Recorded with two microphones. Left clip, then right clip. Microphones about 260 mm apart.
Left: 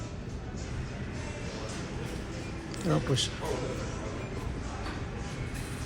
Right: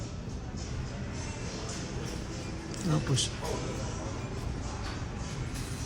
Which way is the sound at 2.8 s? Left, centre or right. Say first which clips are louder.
Left 3 dB; centre.